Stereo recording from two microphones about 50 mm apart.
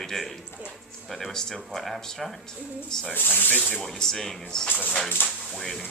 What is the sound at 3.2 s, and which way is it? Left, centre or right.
Speech, left.